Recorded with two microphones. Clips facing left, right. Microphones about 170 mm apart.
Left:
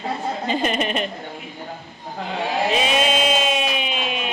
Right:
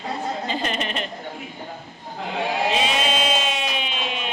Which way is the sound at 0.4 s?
15° left (ahead or behind).